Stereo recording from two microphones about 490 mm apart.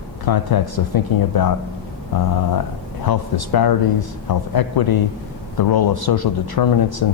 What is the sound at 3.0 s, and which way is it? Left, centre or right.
Speech, left.